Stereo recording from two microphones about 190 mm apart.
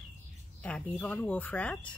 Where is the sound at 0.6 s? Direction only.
5° left (ahead or behind).